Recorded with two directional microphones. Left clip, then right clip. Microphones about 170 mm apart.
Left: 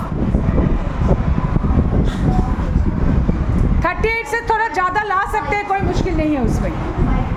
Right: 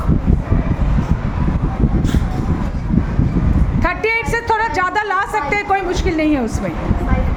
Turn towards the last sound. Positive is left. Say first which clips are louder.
# right 2 dB
turn(degrees=-15)  # may be behind; listen again after turning